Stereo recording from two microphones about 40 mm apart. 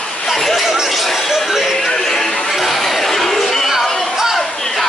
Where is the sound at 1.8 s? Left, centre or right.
Centre.